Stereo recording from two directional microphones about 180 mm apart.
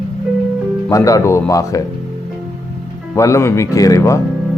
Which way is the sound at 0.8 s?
20° left (ahead or behind).